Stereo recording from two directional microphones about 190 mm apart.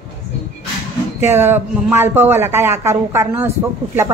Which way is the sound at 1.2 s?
10° right (ahead or behind).